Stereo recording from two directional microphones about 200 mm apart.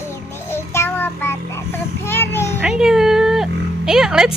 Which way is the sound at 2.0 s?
10° left (ahead or behind).